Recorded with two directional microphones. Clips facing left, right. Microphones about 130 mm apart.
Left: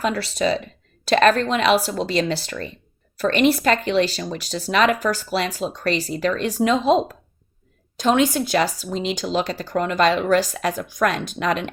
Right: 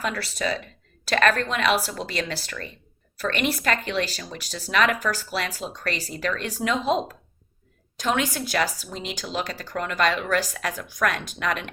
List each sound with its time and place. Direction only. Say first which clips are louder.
0.0 s speech: left 6 dB; 25° left (ahead or behind)